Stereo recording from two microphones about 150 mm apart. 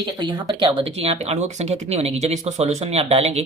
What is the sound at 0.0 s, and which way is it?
Speech, 30° right (ahead or behind).